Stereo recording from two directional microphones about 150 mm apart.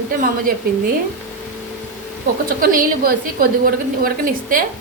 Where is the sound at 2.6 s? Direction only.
70° right (ahead or behind).